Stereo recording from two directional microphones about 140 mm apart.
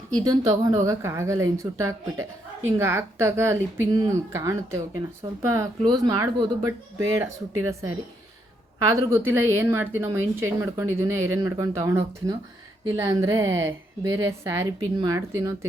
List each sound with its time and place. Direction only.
0.6 s speech: 25° right (ahead or behind)